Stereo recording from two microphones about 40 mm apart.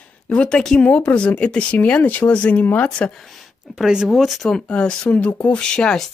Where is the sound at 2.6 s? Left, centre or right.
Left.